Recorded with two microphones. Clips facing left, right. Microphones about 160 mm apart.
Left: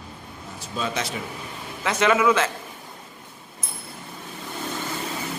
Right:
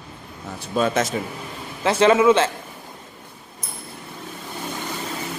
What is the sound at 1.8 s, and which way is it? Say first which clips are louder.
Speech: right 5 dB; 30° right (ahead or behind).